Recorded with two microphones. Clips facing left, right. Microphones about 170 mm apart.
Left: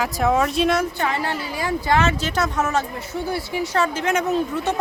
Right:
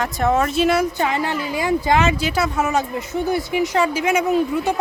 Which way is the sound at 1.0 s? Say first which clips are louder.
Right 3 dB; 15° right (ahead or behind).